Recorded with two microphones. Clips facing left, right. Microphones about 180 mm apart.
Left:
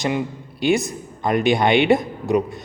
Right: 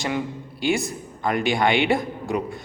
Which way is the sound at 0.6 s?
20° left (ahead or behind).